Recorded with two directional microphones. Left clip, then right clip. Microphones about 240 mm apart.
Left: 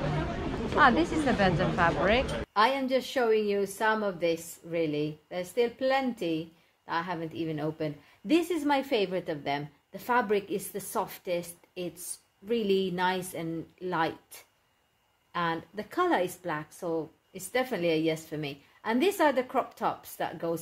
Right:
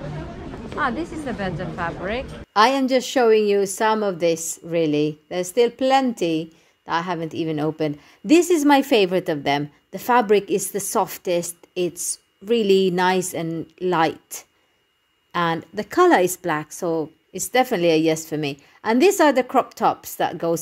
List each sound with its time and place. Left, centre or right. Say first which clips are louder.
0.0 s a woman's voice: left 1 dB; centre
2.5 s a woman's voice: right 9 dB; right